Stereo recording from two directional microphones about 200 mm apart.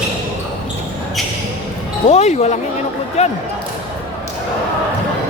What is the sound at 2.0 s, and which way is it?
Speech, 35° left (ahead or behind).